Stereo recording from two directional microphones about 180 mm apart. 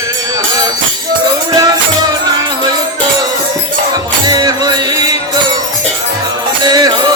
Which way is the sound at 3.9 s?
20° right (ahead or behind).